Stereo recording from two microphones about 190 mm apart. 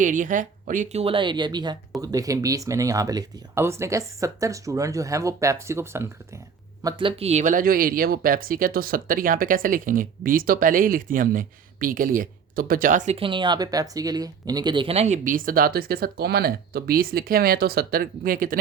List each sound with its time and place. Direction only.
0.0 s speech: 40° right (ahead or behind)
1.0 s speech: 25° right (ahead or behind)
6.8 s speech: 25° right (ahead or behind); by 18.6 s 50° right (ahead or behind)